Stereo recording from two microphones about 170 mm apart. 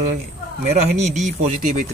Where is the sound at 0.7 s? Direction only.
40° right (ahead or behind).